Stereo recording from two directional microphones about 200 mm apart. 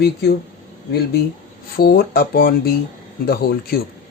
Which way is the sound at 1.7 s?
50° left (ahead or behind).